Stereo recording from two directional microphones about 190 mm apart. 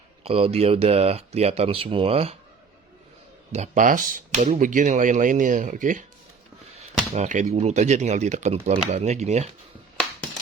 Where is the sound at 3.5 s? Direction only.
40° right (ahead or behind).